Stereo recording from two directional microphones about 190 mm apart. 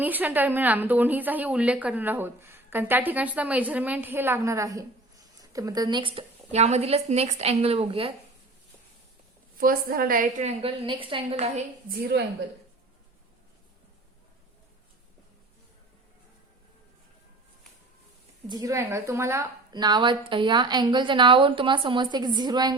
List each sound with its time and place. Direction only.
0.0 s a woman's voice: 10° right (ahead or behind); by 8.1 s 30° right (ahead or behind)
9.6 s a woman's voice: 50° right (ahead or behind); by 11.6 s 30° right (ahead or behind)
11.9 s a woman's voice: 55° right (ahead or behind)
18.4 s a woman's voice: 20° right (ahead or behind)